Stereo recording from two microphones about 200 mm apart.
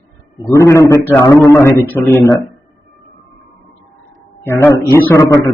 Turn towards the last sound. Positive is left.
turn(degrees=10)  # may be behind; listen again after turning